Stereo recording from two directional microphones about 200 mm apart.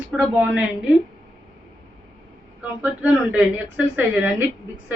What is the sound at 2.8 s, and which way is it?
Speech, 10° right (ahead or behind).